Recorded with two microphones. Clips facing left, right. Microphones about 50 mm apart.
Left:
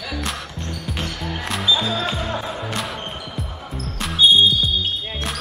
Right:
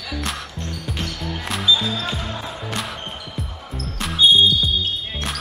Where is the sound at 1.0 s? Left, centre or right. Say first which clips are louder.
Left 1 dB; centre.